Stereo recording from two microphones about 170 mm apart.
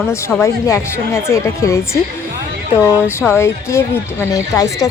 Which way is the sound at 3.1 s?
15° left (ahead or behind).